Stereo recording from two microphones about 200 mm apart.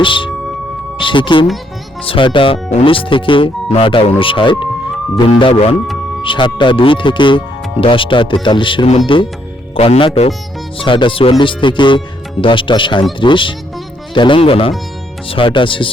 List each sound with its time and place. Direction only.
0.0 s speech: 25° left (ahead or behind)